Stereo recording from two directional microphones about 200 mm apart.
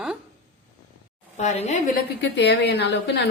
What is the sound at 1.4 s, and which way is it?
Speech, 35° left (ahead or behind).